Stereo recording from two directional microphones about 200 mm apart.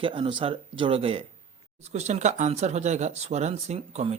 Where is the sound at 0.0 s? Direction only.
25° right (ahead or behind).